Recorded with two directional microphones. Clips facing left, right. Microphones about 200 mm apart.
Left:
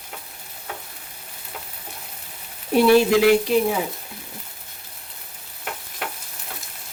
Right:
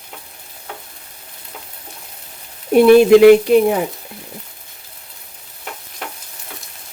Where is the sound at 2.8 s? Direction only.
55° right (ahead or behind).